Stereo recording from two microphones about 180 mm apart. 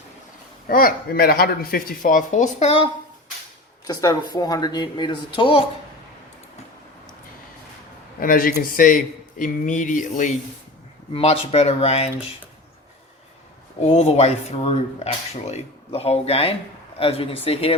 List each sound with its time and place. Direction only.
0.7 s speech: 55° left (ahead or behind); by 2.9 s 35° left (ahead or behind)
3.8 s speech: 20° left (ahead or behind)
8.2 s speech: 50° left (ahead or behind)
11.1 s speech: 35° left (ahead or behind)
13.8 s speech: 40° left (ahead or behind)